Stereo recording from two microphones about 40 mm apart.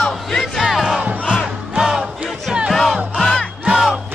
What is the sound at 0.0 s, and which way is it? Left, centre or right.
Battle cry, centre.